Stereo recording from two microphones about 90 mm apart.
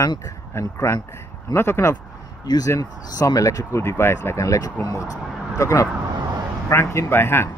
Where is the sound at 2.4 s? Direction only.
50° left (ahead or behind); by 7.5 s 25° left (ahead or behind).